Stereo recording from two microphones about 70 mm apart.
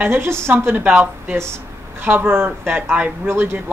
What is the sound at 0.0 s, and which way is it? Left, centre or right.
Speech, right.